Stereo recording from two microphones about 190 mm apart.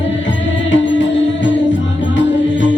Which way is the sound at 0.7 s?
75° left (ahead or behind).